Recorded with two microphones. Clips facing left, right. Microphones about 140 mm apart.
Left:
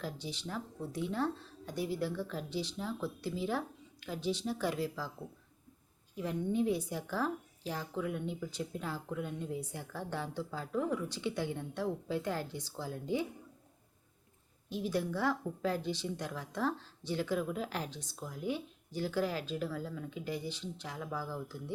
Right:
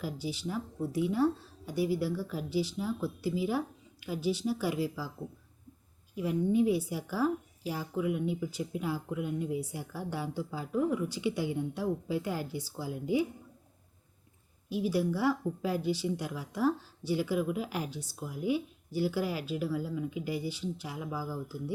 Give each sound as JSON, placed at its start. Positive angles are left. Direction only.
{"t": 0.0, "sound": "a woman's voice", "side_deg": -5}
{"t": 6.1, "sound": "a woman's voice", "side_deg": -5}
{"t": 14.7, "sound": "a woman's voice", "side_deg": -5}